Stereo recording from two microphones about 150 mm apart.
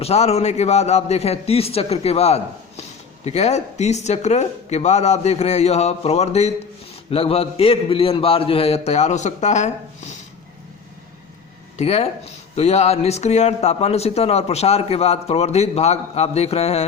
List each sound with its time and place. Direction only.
0.0 s a man's voice: 45° left (ahead or behind)
11.8 s a man's voice: 45° left (ahead or behind)